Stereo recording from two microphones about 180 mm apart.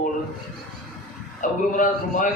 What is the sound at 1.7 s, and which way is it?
Music, 45° left (ahead or behind).